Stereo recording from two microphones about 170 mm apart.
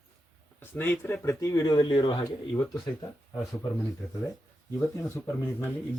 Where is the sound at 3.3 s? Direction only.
5° left (ahead or behind).